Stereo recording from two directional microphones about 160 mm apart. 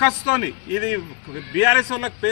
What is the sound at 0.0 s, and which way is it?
A man's voice, 15° right (ahead or behind).